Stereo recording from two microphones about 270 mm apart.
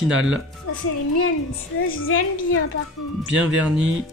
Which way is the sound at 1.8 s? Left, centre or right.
Left.